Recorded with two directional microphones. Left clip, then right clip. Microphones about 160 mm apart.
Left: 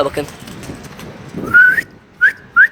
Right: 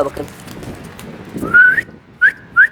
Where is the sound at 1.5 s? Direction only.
20° right (ahead or behind).